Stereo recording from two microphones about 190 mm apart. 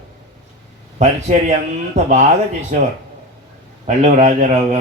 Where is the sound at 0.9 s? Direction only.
35° right (ahead or behind).